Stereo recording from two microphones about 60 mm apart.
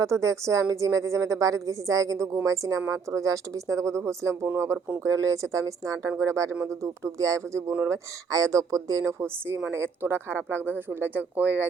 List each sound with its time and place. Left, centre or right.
0.0 s a woman's voice: right
9.1 s a woman's voice: right